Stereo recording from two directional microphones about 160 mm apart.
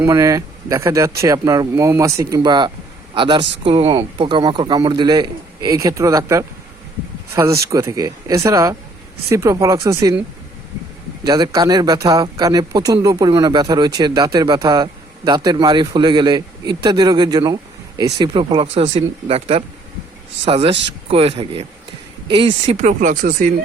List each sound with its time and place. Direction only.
0.0 s speech: 20° right (ahead or behind)
7.7 s speech: 20° right (ahead or behind)
11.3 s speech: 25° right (ahead or behind); by 23.5 s 55° right (ahead or behind)